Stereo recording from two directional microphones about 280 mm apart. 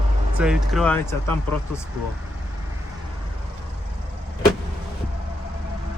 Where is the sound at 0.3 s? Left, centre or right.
Centre.